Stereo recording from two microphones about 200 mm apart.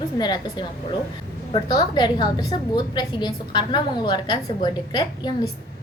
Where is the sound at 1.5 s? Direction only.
20° left (ahead or behind).